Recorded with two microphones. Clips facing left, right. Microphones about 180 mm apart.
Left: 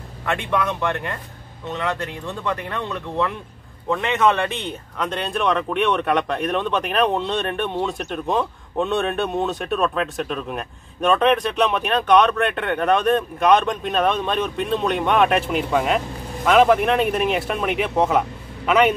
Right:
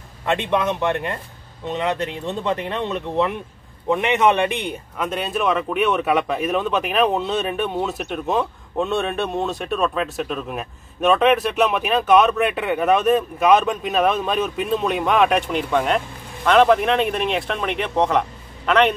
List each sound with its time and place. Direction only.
0.2 s a man's voice: 20° right (ahead or behind); by 18.9 s 5° left (ahead or behind)